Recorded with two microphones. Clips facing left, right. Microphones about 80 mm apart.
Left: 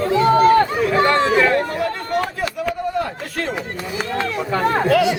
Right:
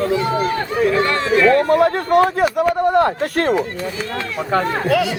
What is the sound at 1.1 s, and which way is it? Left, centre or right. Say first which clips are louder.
Speech: even; left.